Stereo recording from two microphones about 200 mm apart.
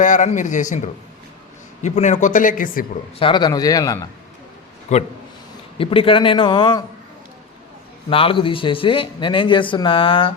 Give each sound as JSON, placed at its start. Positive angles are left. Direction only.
{"t": 0.0, "sound": "speech", "side_deg": 40}
{"t": 3.2, "sound": "speech", "side_deg": 25}
{"t": 4.9, "sound": "speech", "side_deg": 35}
{"t": 8.1, "sound": "speech", "side_deg": 25}